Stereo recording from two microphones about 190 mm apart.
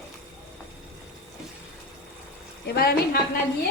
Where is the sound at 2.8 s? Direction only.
55° left (ahead or behind).